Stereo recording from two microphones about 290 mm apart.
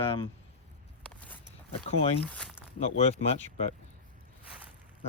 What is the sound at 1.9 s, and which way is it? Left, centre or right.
Speech, left.